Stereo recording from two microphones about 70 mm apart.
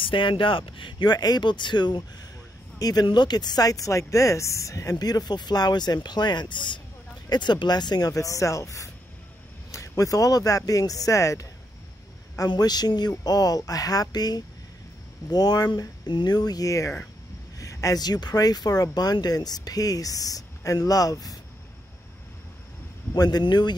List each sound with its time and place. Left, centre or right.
0.9 s speech: left
2.8 s speech: left
8.1 s speech: left
12.4 s speech: left
13.2 s speech: left
23.1 s speech: left